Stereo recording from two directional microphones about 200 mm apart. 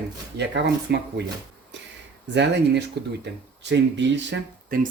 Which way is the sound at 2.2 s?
60° right (ahead or behind).